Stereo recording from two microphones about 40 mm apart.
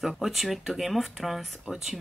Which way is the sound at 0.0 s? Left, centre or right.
Centre.